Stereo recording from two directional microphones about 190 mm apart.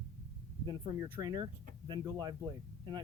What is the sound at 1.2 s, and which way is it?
Speech, 20° right (ahead or behind).